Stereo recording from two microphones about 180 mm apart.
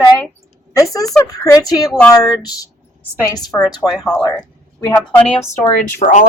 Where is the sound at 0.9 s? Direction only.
20° left (ahead or behind).